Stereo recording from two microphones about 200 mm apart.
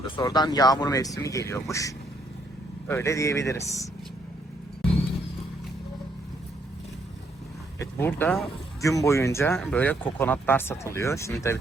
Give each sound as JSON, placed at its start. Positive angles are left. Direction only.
{"t": 0.2, "sound": "speech", "side_deg": 20}
{"t": 7.8, "sound": "speech", "side_deg": 10}